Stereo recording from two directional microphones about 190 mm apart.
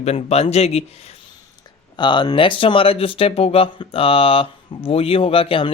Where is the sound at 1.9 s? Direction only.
25° left (ahead or behind).